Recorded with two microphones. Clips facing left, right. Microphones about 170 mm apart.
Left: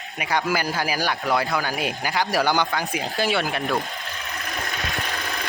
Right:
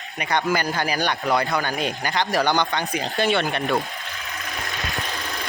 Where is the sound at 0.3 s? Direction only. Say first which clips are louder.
Right 1 dB; 5° left (ahead or behind).